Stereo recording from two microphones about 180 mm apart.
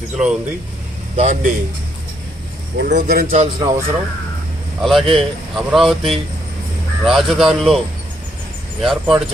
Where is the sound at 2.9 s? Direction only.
50° right (ahead or behind).